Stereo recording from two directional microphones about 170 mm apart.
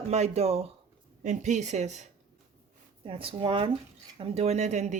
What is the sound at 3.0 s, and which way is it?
Speech, 30° right (ahead or behind).